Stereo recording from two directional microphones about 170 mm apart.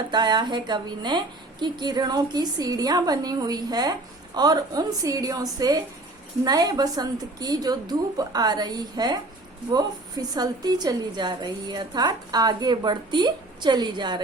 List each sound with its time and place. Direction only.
0.1 s a woman's voice: 25° right (ahead or behind)